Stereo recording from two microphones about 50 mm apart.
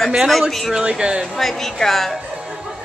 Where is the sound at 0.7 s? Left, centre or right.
Centre.